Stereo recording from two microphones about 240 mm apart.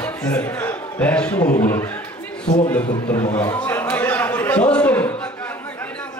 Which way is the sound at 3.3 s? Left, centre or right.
Centre.